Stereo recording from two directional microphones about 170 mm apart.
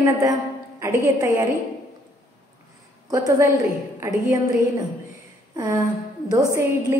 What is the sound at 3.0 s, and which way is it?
Speech, 20° right (ahead or behind).